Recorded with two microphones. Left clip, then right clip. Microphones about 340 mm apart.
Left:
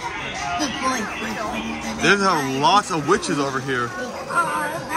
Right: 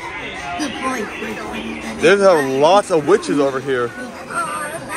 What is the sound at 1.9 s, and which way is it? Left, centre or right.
Speech, centre.